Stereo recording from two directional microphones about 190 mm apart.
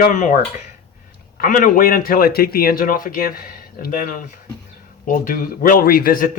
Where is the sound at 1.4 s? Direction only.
45° left (ahead or behind).